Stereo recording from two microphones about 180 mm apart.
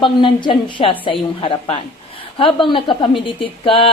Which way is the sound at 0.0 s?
25° left (ahead or behind).